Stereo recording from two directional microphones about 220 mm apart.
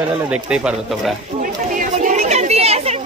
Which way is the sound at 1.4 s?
35° right (ahead or behind).